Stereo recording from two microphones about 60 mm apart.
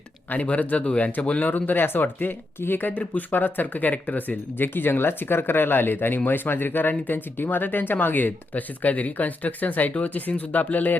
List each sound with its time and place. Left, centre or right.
0.3 s speech: left